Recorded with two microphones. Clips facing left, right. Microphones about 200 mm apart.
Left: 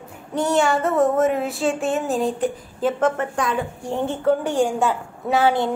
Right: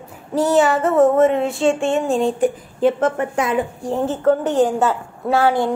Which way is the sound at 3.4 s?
20° right (ahead or behind).